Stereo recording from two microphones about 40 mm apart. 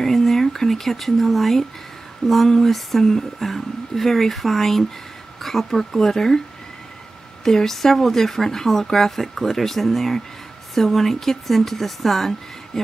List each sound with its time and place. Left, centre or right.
0.0 s a sound: centre
2.2 s a woman's voice: centre
7.4 s a woman's voice: centre